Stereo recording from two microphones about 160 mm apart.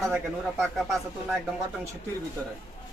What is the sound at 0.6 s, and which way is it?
Speech, centre (ahead or behind).